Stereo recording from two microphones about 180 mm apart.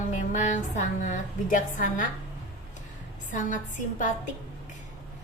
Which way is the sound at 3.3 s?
45° left (ahead or behind).